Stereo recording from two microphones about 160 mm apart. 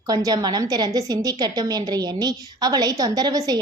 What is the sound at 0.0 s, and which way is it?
A woman's voice, 20° right (ahead or behind).